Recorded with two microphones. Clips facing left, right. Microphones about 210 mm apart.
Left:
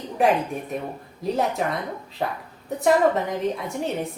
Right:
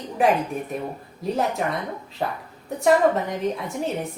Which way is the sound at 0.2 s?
Centre (ahead or behind).